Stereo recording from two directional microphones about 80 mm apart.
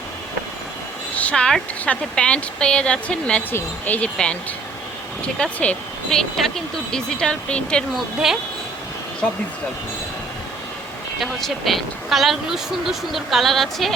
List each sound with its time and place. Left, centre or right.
1.1 s speech: centre
7.9 s speech: centre
11.2 s speech: centre